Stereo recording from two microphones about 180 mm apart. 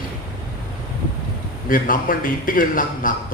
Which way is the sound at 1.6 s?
50° left (ahead or behind).